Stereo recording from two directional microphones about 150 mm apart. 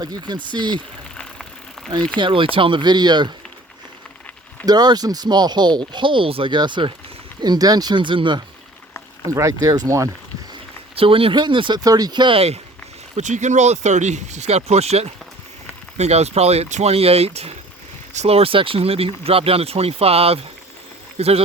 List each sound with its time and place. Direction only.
0.0 s speech: 30° right (ahead or behind)
1.1 s a sound: 5° left (ahead or behind)
2.1 s speech: 35° right (ahead or behind)
4.6 s speech: 25° right (ahead or behind)
9.2 s speech: 20° right (ahead or behind)
10.9 s speech: 40° right (ahead or behind)
13.1 s speech: 50° right (ahead or behind)